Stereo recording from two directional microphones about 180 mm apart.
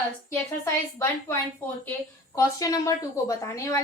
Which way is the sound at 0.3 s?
15° left (ahead or behind).